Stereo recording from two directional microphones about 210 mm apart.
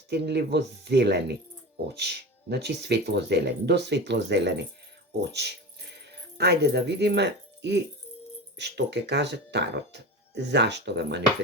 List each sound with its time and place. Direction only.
0.1 s speech: 50° right (ahead or behind)